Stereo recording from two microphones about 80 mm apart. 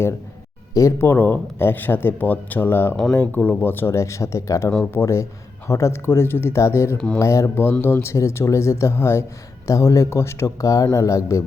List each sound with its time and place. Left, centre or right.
0.7 s speech: left
2.9 s speech: centre
3.2 s speech: centre; by 11.4 s left